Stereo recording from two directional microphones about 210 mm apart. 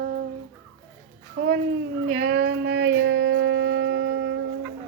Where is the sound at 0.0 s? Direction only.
45° right (ahead or behind).